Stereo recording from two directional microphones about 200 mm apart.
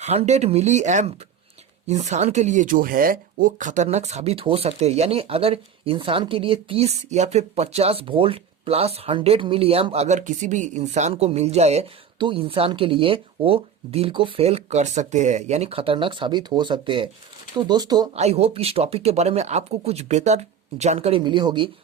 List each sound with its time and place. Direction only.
0.0 s speech: 30° right (ahead or behind)
18.1 s speech: 30° right (ahead or behind)